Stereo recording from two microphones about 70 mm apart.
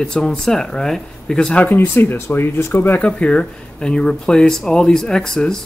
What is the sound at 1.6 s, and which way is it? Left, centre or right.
Speech, left.